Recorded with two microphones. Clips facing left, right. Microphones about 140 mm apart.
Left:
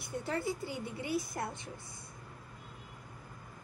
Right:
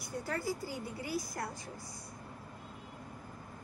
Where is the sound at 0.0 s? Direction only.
25° left (ahead or behind).